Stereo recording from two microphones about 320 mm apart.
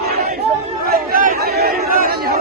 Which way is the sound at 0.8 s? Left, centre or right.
Right.